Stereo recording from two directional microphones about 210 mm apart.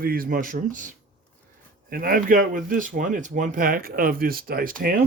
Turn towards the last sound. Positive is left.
turn(degrees=-40)  # may be behind; listen again after turning